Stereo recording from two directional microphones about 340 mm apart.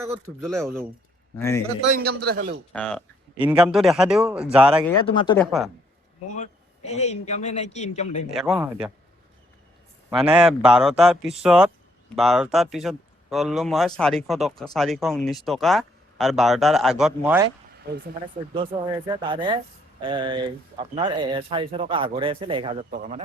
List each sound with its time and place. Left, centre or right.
0.0 s speech: centre
2.2 s a man's voice: right
2.7 s speech: centre
5.0 s speech: centre
5.5 s speech: centre
6.3 s speech: left
8.3 s speech: centre
10.1 s speech: centre
17.7 s speech: right
18.5 s speech: centre